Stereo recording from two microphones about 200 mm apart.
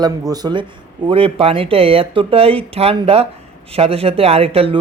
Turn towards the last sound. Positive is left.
turn(degrees=-30)  # may be behind; listen again after turning